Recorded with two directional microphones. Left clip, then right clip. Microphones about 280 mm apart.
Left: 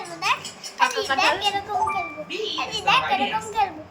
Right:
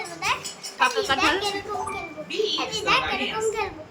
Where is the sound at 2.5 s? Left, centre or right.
Centre.